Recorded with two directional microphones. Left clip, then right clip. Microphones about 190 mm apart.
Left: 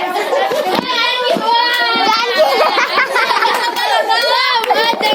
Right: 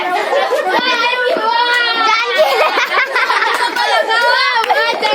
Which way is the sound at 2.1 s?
25° right (ahead or behind).